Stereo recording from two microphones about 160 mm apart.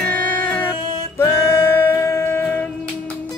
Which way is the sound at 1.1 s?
15° left (ahead or behind).